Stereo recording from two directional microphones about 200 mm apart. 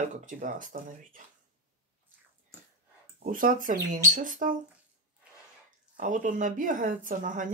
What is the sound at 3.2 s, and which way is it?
Speech, 45° right (ahead or behind).